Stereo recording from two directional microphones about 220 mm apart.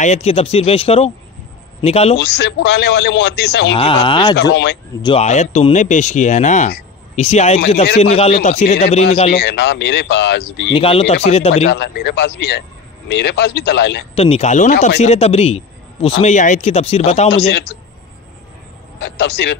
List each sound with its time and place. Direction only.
0.0 s a man's voice: 30° left (ahead or behind)
2.1 s speech: 50° left (ahead or behind)
3.6 s a man's voice: 25° left (ahead or behind)
4.4 s speech: 50° left (ahead or behind)
5.0 s a man's voice: 30° left (ahead or behind)
9.3 s speech: 50° left (ahead or behind)
10.7 s a man's voice: 25° left (ahead or behind)
11.7 s speech: 50° left (ahead or behind)
14.1 s a man's voice: 25° left (ahead or behind)
17.5 s speech: 50° left (ahead or behind)
18.9 s speech: 50° left (ahead or behind)